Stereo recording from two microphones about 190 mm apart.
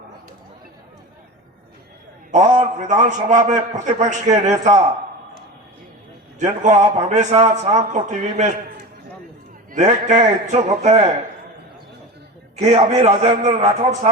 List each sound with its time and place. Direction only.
2.3 s a man's voice: 40° right (ahead or behind)
6.4 s a man's voice: 40° right (ahead or behind)
9.7 s a man's voice: 40° right (ahead or behind)
12.5 s a man's voice: 35° right (ahead or behind)